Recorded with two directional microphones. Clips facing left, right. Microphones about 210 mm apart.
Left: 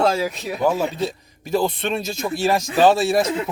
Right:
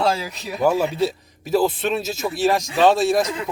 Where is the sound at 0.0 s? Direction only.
50° left (ahead or behind).